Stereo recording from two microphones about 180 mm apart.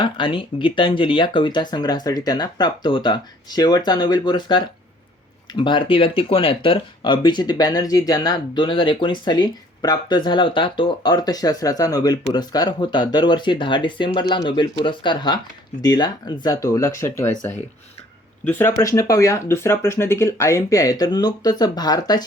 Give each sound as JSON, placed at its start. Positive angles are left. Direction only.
{"t": 0.0, "sound": "speech", "side_deg": 30}
{"t": 18.4, "sound": "speech", "side_deg": 10}